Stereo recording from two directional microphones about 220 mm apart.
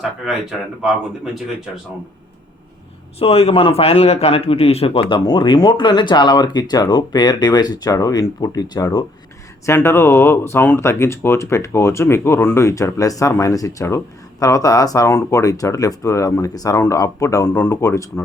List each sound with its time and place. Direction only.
3.2 s a man's voice: 25° left (ahead or behind)